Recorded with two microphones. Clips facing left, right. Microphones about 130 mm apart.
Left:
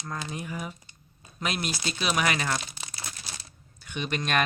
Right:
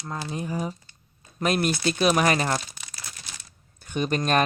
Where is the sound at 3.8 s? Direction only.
40° right (ahead or behind).